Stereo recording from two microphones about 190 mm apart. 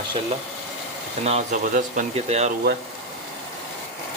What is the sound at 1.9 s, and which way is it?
Speech, 35° right (ahead or behind).